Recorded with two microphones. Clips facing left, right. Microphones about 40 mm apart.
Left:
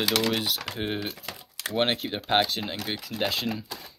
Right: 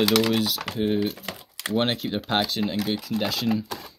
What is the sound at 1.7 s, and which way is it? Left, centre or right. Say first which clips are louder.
Speech: right 2 dB; centre.